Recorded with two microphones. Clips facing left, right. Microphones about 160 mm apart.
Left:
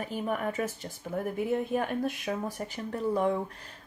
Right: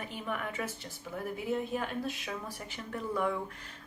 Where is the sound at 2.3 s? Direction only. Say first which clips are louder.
Left 7 dB; 45° left (ahead or behind).